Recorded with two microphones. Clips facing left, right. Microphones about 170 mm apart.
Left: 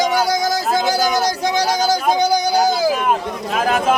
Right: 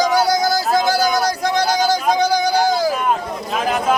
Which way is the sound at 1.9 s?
5° left (ahead or behind).